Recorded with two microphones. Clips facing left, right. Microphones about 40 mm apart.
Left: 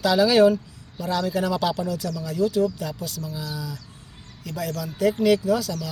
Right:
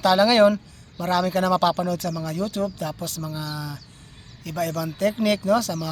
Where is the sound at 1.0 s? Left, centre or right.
Right.